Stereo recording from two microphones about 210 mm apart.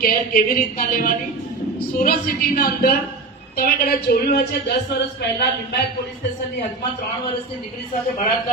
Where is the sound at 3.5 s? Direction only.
45° left (ahead or behind).